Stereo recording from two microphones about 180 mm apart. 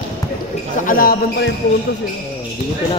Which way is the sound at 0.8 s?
50° left (ahead or behind).